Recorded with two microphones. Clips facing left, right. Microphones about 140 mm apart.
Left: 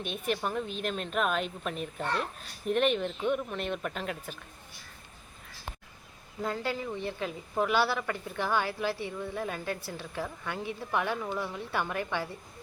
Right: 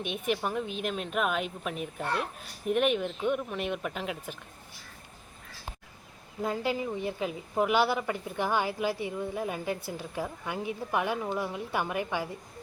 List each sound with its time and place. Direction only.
0.0 s a woman's voice: 15° right (ahead or behind)
6.4 s a woman's voice: 15° right (ahead or behind)